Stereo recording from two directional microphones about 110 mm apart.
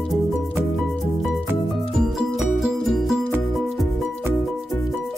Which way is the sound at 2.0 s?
5° right (ahead or behind).